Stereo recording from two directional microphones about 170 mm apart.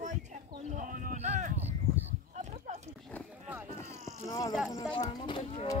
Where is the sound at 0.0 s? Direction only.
45° right (ahead or behind).